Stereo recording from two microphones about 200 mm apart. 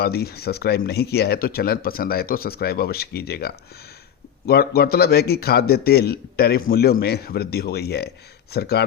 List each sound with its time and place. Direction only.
0.0 s a man's voice: 50° left (ahead or behind)